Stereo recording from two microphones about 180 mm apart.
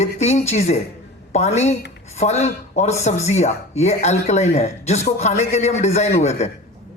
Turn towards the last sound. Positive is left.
turn(degrees=40)  # may be behind; listen again after turning